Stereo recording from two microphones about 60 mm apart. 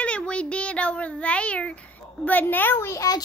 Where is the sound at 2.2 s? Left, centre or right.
Left.